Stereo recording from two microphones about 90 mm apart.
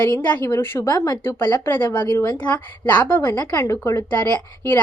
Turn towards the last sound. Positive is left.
turn(degrees=20)  # may be behind; listen again after turning